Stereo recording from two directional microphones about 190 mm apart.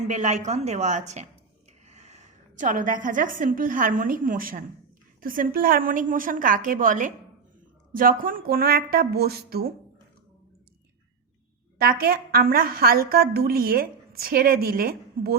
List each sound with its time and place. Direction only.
0.0 s a woman's voice: 40° right (ahead or behind); by 9.7 s 55° right (ahead or behind)
11.8 s a woman's voice: 50° right (ahead or behind)